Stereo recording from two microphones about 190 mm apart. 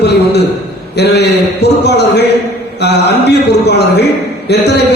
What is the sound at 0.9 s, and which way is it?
Speech, 60° left (ahead or behind).